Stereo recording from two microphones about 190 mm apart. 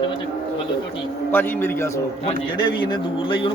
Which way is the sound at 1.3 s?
10° left (ahead or behind).